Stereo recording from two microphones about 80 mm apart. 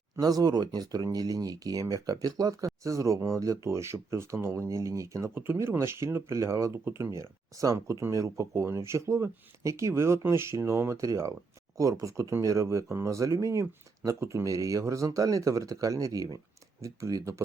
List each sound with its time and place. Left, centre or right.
0.2 s speech: right